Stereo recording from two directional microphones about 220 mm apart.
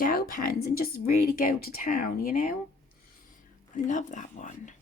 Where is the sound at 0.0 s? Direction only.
40° left (ahead or behind).